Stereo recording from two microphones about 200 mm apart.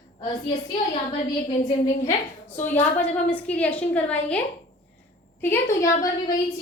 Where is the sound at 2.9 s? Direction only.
5° left (ahead or behind).